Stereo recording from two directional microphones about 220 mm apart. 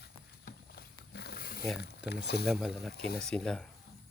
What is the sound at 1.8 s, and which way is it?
Speech, 50° left (ahead or behind).